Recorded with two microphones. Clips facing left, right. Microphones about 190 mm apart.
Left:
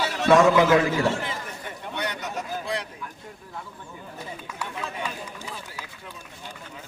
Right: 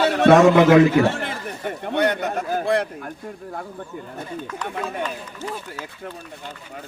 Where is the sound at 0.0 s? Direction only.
60° right (ahead or behind).